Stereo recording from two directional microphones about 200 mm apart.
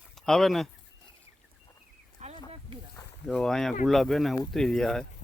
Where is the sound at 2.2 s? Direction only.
35° right (ahead or behind).